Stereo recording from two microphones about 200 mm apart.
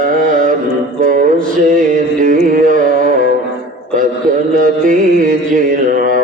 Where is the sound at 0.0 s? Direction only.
40° right (ahead or behind).